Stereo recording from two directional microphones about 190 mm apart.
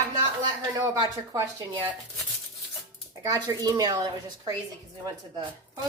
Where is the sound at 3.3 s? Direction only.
20° right (ahead or behind).